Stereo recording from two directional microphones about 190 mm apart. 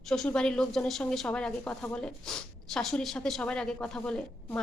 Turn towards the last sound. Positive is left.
turn(degrees=5)  # may be behind; listen again after turning